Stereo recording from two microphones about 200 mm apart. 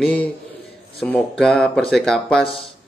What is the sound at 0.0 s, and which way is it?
Speech, 5° left (ahead or behind).